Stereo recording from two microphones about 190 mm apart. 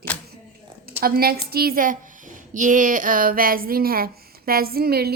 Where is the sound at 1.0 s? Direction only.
50° right (ahead or behind).